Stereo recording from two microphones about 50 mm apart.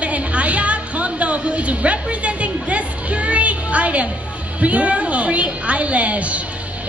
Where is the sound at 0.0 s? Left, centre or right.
Right.